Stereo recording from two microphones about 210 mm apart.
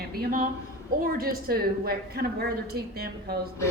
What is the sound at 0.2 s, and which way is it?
A man's voice, 40° right (ahead or behind).